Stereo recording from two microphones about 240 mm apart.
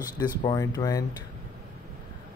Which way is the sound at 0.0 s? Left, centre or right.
Centre.